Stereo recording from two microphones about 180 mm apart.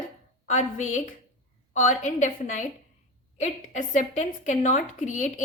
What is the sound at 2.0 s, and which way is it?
A woman's voice, 45° left (ahead or behind).